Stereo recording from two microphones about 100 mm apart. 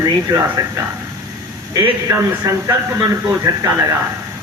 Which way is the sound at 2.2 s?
35° right (ahead or behind).